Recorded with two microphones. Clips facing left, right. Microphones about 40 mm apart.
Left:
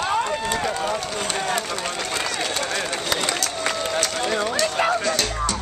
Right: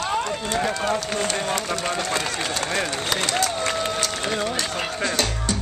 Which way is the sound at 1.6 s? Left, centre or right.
Centre.